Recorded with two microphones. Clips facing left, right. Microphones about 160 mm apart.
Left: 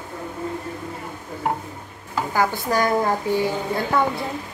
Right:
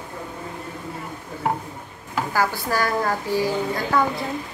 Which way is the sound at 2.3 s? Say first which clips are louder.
Left 2 dB; 20° left (ahead or behind).